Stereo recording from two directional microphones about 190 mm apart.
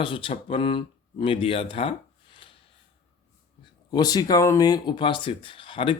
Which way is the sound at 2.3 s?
25° left (ahead or behind).